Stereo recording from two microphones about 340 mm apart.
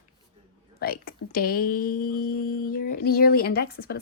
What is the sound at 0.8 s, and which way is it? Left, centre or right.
Speech, left.